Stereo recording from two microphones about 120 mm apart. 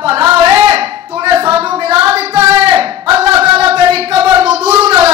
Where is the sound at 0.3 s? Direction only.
50° right (ahead or behind).